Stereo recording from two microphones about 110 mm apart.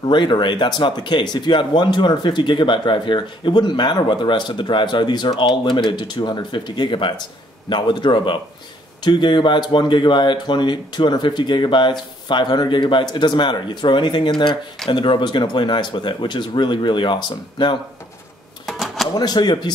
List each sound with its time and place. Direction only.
0.0 s speech: 45° left (ahead or behind)
18.7 s a sound: centre (ahead or behind)
19.1 s speech: 40° left (ahead or behind)